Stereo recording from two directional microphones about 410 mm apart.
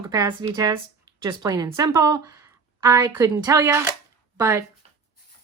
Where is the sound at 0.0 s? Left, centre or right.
Centre.